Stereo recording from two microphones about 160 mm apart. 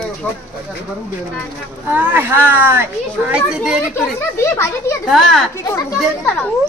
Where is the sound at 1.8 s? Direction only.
15° right (ahead or behind).